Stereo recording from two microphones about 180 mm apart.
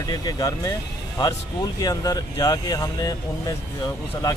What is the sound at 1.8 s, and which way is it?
Speech, 20° left (ahead or behind).